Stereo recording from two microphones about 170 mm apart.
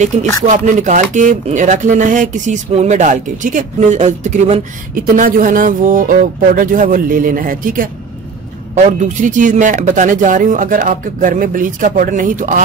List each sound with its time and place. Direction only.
0.1 s speech: 40° right (ahead or behind)